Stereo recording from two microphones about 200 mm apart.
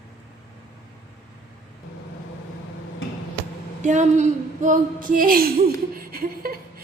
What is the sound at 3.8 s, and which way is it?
Speech, 35° right (ahead or behind).